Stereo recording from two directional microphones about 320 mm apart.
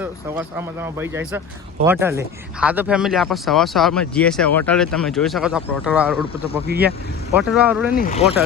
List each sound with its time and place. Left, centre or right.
0.0 s speech: centre
6.7 s speech: right
7.5 s speech: centre
7.9 s speech: left